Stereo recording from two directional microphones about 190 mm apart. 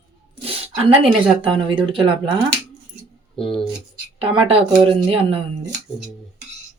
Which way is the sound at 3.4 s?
25° left (ahead or behind).